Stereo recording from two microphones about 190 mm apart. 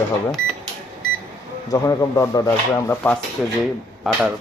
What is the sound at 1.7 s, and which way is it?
Speech, 15° left (ahead or behind).